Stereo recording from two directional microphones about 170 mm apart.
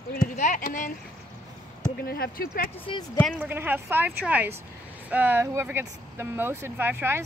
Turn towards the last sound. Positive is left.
turn(degrees=-10)  # may be behind; listen again after turning